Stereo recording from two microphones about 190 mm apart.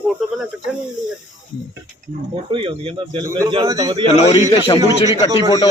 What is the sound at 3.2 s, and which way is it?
Speech, 20° right (ahead or behind).